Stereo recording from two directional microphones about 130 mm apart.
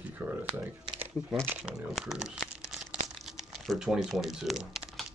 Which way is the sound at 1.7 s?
Centre (ahead or behind).